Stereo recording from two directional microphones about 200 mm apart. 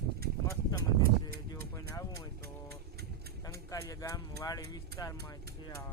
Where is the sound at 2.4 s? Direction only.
50° right (ahead or behind).